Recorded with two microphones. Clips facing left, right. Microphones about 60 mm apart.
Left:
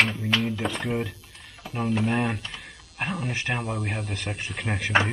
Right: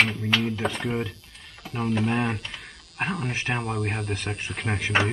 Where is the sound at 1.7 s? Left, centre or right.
Centre.